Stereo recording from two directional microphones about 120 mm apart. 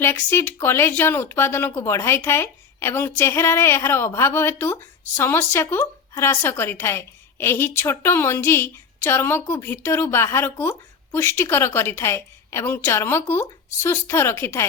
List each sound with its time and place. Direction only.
0.0 s speech: 20° left (ahead or behind)